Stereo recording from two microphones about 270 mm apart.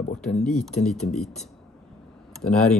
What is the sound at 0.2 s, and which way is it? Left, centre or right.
Speech, centre.